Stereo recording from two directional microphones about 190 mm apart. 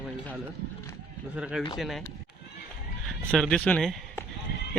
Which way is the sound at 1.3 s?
5° right (ahead or behind).